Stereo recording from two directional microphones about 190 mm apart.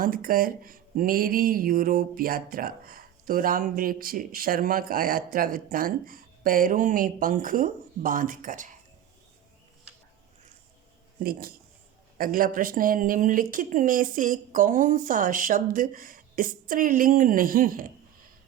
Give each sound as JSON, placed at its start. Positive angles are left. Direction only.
{"t": 0.0, "sound": "speech", "side_deg": -50}
{"t": 11.2, "sound": "speech", "side_deg": -50}